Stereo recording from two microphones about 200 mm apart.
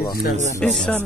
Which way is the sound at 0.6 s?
5° left (ahead or behind).